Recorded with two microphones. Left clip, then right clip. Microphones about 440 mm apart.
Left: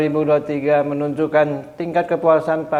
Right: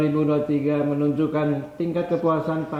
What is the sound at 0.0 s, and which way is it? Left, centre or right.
A man's voice, left.